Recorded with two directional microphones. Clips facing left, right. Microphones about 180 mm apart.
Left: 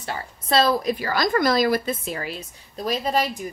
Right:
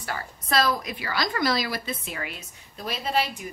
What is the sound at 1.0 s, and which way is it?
A woman's voice, 45° left (ahead or behind).